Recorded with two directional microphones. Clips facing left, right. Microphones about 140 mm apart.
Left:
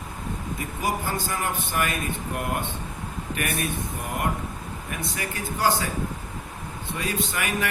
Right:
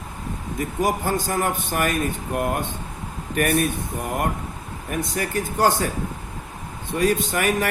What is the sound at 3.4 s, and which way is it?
Speech, 45° right (ahead or behind).